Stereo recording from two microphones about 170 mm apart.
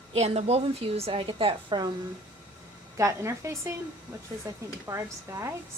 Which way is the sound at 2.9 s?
15° right (ahead or behind).